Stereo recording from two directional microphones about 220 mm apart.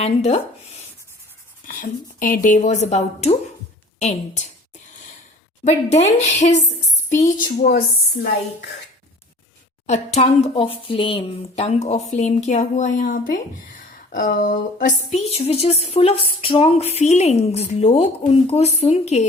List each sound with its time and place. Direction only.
0.0 s speech: 30° left (ahead or behind)
1.6 s speech: 40° left (ahead or behind)
5.6 s speech: 30° left (ahead or behind); by 8.3 s 45° left (ahead or behind)
10.2 s speech: 25° left (ahead or behind)